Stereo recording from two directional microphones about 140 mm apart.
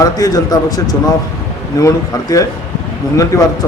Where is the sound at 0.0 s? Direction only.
25° left (ahead or behind).